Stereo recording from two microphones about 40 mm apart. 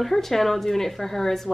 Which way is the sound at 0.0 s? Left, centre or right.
Centre.